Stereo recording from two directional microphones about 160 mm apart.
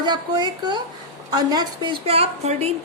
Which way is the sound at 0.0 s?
25° right (ahead or behind).